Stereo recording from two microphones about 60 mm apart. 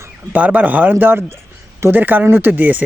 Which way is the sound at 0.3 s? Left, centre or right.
Right.